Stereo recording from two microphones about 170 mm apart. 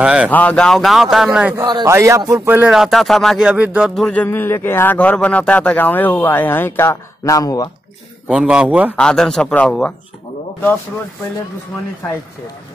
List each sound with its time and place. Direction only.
0.0 s speech: 5° right (ahead or behind)
0.3 s speech: 10° left (ahead or behind)
1.6 s a man's voice: 25° right (ahead or behind); by 4.0 s 5° right (ahead or behind)
4.0 s speech: 10° left (ahead or behind)
8.3 s speech: 5° right (ahead or behind)
8.9 s speech: 5° left (ahead or behind)